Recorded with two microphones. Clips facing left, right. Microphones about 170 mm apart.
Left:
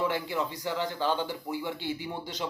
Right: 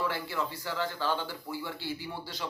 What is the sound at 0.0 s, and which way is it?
Speech, 20° left (ahead or behind).